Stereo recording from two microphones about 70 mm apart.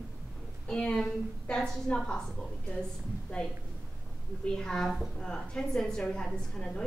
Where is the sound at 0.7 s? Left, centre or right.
Centre.